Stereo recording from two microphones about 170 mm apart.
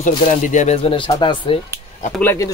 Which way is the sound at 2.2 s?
15° left (ahead or behind).